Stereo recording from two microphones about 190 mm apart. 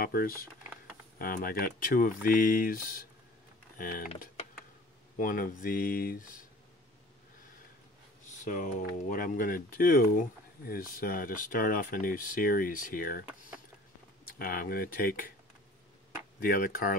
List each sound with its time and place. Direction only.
0.0 s speech: 50° left (ahead or behind)
5.2 s speech: 45° left (ahead or behind)
8.5 s speech: 40° left (ahead or behind)
14.2 s speech: 50° left (ahead or behind)
16.3 s speech: 50° left (ahead or behind)